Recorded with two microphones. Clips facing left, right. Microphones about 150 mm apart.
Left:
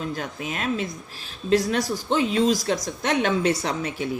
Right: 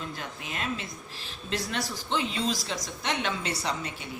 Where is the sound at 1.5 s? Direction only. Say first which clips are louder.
Left 10 dB; 45° left (ahead or behind).